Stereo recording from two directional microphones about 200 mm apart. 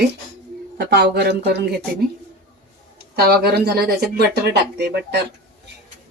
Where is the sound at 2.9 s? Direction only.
50° right (ahead or behind).